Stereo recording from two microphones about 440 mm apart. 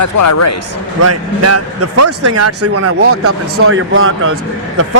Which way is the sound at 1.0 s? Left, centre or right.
Right.